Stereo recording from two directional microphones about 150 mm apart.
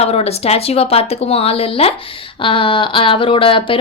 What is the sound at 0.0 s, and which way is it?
Speech, 45° left (ahead or behind).